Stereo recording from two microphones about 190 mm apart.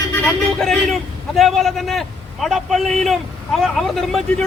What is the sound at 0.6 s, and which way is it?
A man's voice, centre (ahead or behind).